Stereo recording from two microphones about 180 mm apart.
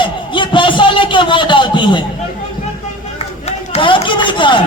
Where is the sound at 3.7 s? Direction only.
30° left (ahead or behind).